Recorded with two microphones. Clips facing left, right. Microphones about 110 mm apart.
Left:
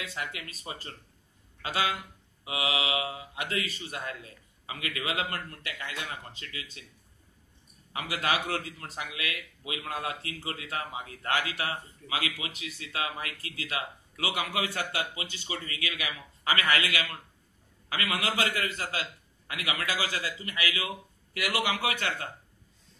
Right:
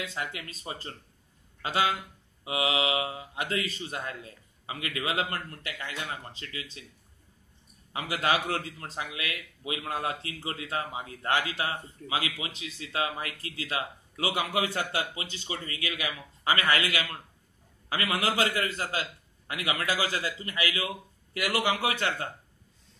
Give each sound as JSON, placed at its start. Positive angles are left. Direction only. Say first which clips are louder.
{"t": 0.1, "sound": "a man's voice", "louder": "right 2 dB", "side_deg": -30}
{"t": 7.9, "sound": "a man's voice", "louder": "right 2 dB", "side_deg": -25}